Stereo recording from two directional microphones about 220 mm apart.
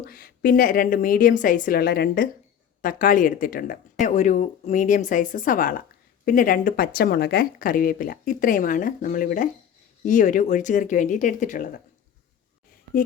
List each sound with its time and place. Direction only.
0.0 s a woman's voice: 40° left (ahead or behind)